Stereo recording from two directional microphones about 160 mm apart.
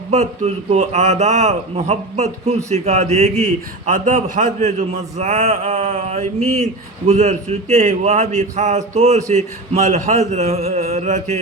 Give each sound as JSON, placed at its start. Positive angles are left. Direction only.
{"t": 0.1, "sound": "a man's voice", "side_deg": -45}